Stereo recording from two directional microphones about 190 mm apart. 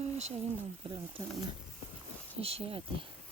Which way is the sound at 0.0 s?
35° right (ahead or behind).